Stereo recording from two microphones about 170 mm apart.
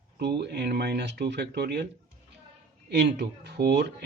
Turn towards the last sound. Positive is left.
turn(degrees=-80)